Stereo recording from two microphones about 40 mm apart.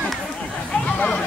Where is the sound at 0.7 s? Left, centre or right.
Left.